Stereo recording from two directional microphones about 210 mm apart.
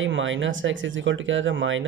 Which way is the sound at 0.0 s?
65° right (ahead or behind).